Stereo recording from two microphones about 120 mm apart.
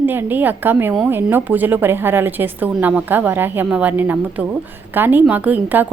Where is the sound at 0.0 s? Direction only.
15° right (ahead or behind).